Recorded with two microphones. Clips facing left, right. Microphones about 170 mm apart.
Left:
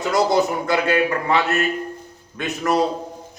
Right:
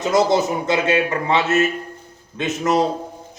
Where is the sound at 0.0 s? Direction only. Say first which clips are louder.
Right 1 dB; 20° right (ahead or behind).